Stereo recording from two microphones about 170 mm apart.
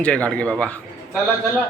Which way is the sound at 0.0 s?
5° left (ahead or behind).